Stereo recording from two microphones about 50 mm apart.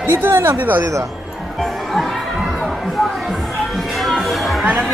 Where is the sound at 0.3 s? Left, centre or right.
Right.